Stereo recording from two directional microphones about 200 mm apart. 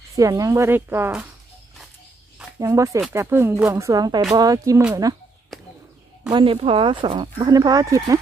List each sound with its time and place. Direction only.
0.1 s speech: 15° right (ahead or behind)
2.6 s speech: 15° right (ahead or behind)
6.3 s speech: 25° right (ahead or behind)